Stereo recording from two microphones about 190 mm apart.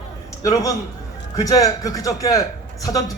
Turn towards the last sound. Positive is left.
turn(degrees=20)  # may be behind; listen again after turning